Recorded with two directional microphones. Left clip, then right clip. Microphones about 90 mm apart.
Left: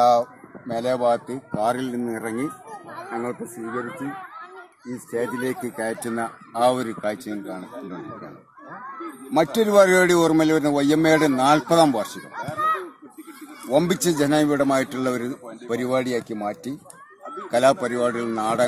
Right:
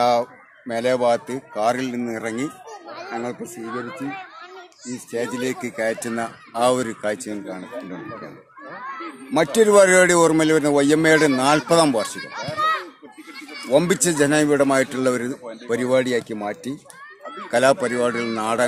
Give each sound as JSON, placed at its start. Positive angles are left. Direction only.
{"t": 0.0, "sound": "speech", "side_deg": -40}
{"t": 1.6, "sound": "speech", "side_deg": 0}
{"t": 2.0, "sound": "speech", "side_deg": -15}
{"t": 2.9, "sound": "children playing", "side_deg": 10}
{"t": 3.6, "sound": "speech", "side_deg": -35}
{"t": 5.3, "sound": "speech", "side_deg": -15}
{"t": 5.8, "sound": "speech", "side_deg": 0}
{"t": 6.2, "sound": "a man's voice", "side_deg": -20}
{"t": 8.7, "sound": "snicker", "side_deg": 0}
{"t": 9.3, "sound": "a man's voice", "side_deg": -25}
{"t": 12.4, "sound": "children playing", "side_deg": 20}
{"t": 13.7, "sound": "a man's voice", "side_deg": -30}